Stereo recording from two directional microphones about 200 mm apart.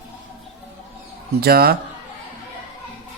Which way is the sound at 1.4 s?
50° right (ahead or behind).